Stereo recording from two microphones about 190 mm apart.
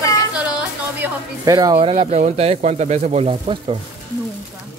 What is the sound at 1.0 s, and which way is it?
Speech, 20° right (ahead or behind).